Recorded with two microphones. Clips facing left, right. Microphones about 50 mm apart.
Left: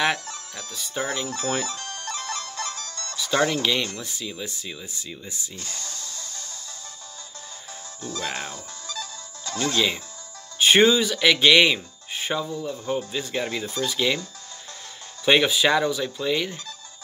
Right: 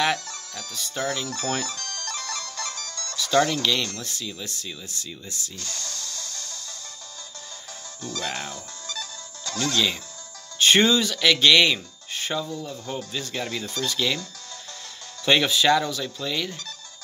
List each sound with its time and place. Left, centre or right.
0.0 s music: centre
3.2 s speech: centre
8.0 s music: left
10.6 s speech: centre
15.2 s speech: centre